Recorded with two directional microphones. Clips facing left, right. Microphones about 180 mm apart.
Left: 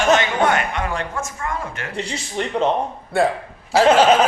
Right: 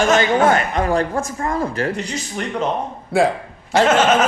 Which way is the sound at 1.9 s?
30° left (ahead or behind).